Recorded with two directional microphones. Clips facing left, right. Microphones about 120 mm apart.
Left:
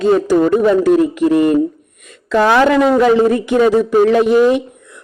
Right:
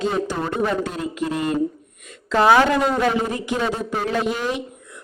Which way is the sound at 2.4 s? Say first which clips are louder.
Left 4 dB; 90° left.